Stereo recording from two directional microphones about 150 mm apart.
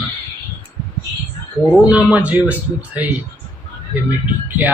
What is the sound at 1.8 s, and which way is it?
Speech, 10° right (ahead or behind).